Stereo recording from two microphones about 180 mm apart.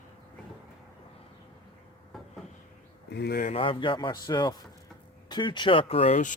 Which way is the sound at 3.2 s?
60° left (ahead or behind).